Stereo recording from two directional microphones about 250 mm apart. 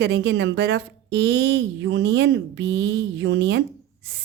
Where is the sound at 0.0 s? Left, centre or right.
Right.